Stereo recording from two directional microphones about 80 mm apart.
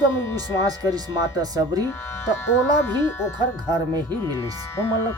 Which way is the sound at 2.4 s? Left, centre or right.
Left.